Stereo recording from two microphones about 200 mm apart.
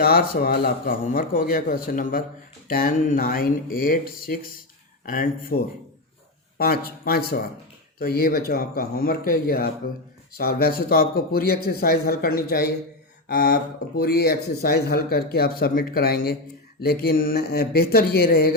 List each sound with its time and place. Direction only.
0.0 s speech: 50° left (ahead or behind)